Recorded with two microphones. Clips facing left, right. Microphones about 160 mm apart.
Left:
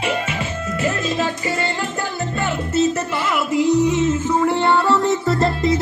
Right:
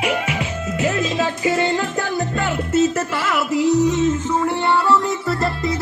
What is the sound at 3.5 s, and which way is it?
Music, centre (ahead or behind).